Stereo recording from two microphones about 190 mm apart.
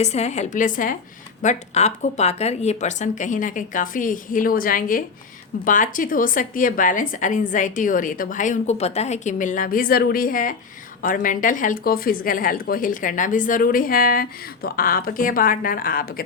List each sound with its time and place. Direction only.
0.0 s a woman's voice: 35° left (ahead or behind)